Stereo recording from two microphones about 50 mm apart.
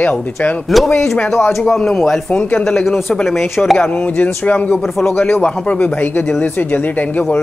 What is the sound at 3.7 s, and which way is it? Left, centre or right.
Speech, left.